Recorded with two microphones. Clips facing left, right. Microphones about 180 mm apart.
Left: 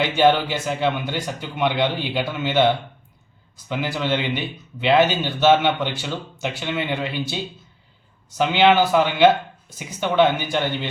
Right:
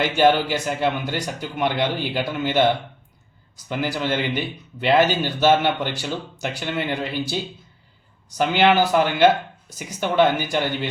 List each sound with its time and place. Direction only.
0.2 s speech: centre (ahead or behind)
3.7 s speech: 5° right (ahead or behind)
8.4 s speech: 5° right (ahead or behind)